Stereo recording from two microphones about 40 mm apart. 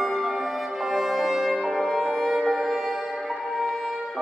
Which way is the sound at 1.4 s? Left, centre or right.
Centre.